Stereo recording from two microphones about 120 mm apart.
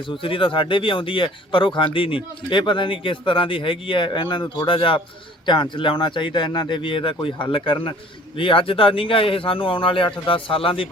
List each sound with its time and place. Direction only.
0.1 s speech: 45° left (ahead or behind)